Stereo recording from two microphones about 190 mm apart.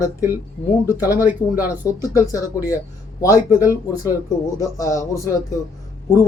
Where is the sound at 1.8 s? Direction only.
15° left (ahead or behind).